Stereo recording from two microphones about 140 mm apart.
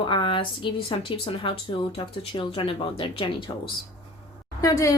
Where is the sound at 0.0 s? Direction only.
35° left (ahead or behind).